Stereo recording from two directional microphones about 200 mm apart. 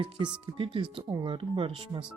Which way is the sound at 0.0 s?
25° right (ahead or behind).